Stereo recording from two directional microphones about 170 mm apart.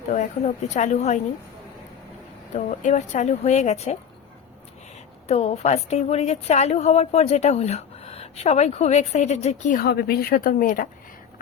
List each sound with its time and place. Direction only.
0.1 s a woman's voice: 40° left (ahead or behind)
2.5 s a woman's voice: 45° left (ahead or behind)
5.3 s a woman's voice: 40° left (ahead or behind)
9.8 s speech: 65° left (ahead or behind)